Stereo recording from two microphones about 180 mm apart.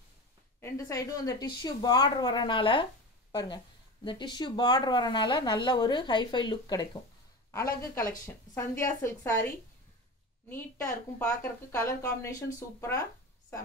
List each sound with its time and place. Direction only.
0.6 s a woman's voice: 15° left (ahead or behind)
10.5 s a woman's voice: 15° left (ahead or behind)